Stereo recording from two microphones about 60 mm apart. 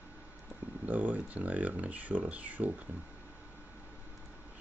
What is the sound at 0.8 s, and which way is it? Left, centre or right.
Speech, right.